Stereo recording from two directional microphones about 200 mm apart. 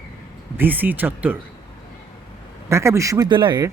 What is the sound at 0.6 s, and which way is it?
Speech, 10° right (ahead or behind).